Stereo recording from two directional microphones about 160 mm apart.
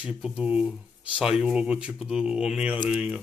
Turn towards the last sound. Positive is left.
turn(degrees=-5)  # may be behind; listen again after turning